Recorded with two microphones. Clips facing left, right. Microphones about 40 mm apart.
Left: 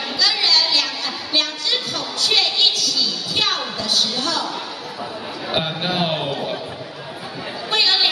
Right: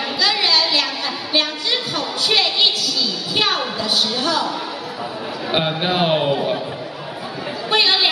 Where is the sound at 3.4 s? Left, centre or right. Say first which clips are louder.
Right 3 dB; centre.